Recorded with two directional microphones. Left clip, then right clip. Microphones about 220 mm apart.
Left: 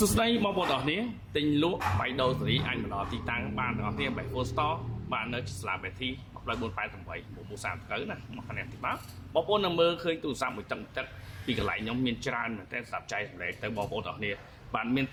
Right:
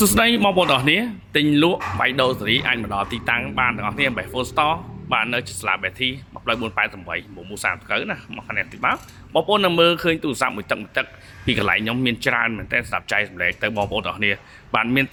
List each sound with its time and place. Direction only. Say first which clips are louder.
0.0 s speech: right 10 dB; 40° right (ahead or behind)